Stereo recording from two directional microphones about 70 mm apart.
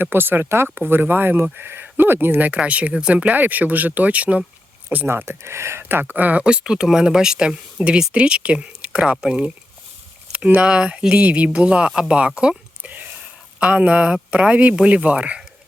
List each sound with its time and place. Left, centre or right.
0.0 s speech: right
4.9 s speech: right